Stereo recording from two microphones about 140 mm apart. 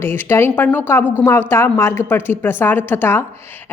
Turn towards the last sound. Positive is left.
turn(degrees=15)  # may be behind; listen again after turning